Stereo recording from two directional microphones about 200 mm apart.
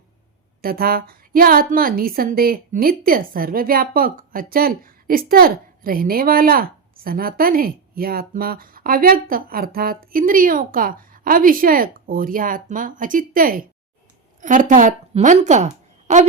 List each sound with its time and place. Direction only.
0.6 s a woman's voice: 50° right (ahead or behind)